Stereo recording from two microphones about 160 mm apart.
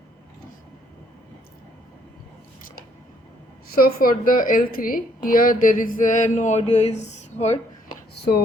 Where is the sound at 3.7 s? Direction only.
65° left (ahead or behind); by 7.5 s 45° left (ahead or behind).